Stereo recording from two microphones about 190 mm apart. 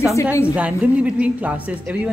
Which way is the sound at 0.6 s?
5° right (ahead or behind).